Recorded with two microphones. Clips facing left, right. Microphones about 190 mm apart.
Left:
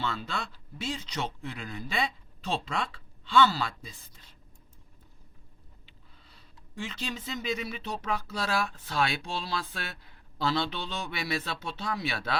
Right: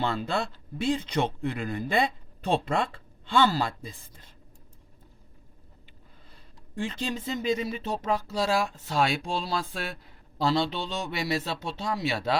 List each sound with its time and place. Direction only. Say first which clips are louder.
0.0 s speech: right 6 dB; 50° right (ahead or behind)
6.7 s speech: right 5 dB; 45° right (ahead or behind)